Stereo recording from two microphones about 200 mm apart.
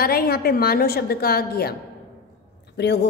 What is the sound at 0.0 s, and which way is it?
A woman's voice, 50° left (ahead or behind).